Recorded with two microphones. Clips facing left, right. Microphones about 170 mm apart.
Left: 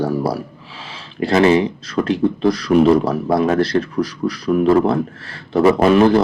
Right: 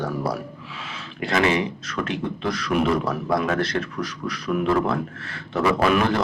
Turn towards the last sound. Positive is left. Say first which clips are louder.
# left 8 dB
turn(degrees=35)  # may be behind; listen again after turning